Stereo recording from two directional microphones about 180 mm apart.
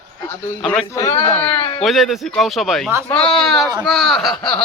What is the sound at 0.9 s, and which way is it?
Speech, 15° left (ahead or behind).